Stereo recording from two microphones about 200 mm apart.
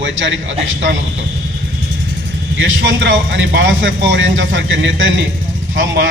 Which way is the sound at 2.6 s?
70° right (ahead or behind).